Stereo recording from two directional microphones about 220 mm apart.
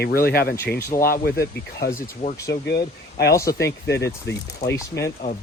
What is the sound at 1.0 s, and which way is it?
Speech, 45° left (ahead or behind).